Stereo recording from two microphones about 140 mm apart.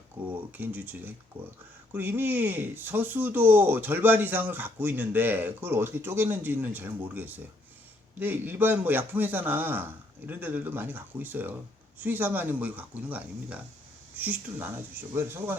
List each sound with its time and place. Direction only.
0.5 s speech: 10° right (ahead or behind)